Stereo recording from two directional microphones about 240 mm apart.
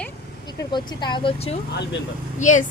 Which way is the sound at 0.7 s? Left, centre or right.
Centre.